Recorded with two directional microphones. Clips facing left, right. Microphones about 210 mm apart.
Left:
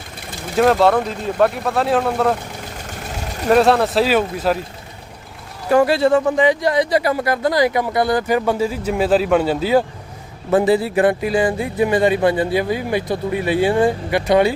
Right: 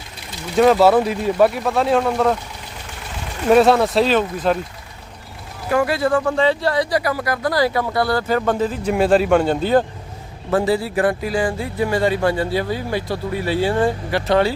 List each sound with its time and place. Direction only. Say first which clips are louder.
0.5 s speech: right 1 dB; centre (ahead or behind)
3.5 s speech: right 1 dB; centre (ahead or behind)
5.7 s speech: left 4 dB; 30° left (ahead or behind); by 9.8 s 5° left (ahead or behind)
10.5 s speech: left 3 dB; 20° left (ahead or behind)